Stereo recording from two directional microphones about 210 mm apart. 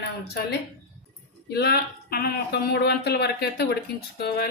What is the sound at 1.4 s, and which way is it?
Speech, 50° left (ahead or behind).